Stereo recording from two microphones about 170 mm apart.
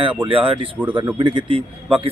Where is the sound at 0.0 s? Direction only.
30° right (ahead or behind).